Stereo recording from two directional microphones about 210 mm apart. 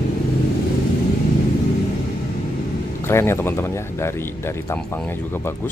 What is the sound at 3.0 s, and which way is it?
Speech, 10° left (ahead or behind).